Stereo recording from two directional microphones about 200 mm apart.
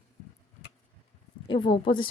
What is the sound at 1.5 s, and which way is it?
Speech, 25° left (ahead or behind).